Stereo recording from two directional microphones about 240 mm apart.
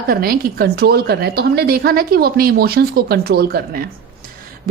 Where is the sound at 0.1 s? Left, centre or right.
Right.